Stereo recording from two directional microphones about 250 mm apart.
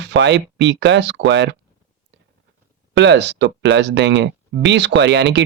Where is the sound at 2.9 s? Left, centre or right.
Right.